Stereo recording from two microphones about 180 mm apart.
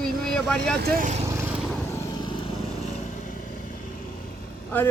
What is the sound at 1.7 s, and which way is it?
Vehicle, 10° left (ahead or behind).